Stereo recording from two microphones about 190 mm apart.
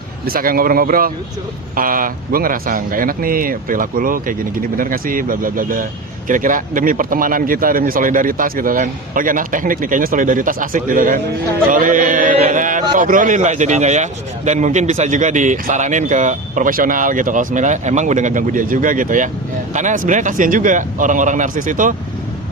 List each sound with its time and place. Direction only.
0.3 s a man's voice: 50° right (ahead or behind)